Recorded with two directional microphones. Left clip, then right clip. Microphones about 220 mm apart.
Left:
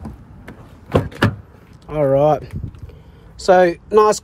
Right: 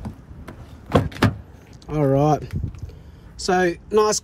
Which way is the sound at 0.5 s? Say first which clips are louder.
Left 2 dB; centre (ahead or behind).